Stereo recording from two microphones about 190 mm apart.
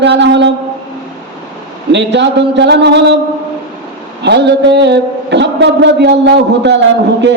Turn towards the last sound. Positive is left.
turn(degrees=-65)  # may be behind; listen again after turning